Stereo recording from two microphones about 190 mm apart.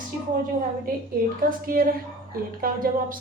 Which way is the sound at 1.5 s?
50° right (ahead or behind).